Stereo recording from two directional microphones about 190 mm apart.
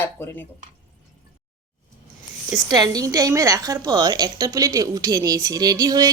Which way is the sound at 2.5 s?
20° right (ahead or behind).